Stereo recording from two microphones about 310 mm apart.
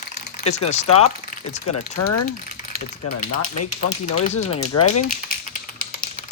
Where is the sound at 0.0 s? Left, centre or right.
Left.